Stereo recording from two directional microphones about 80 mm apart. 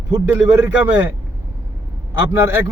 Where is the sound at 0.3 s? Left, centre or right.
Right.